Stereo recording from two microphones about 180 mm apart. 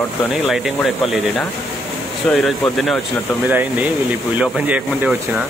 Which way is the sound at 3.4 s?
10° right (ahead or behind).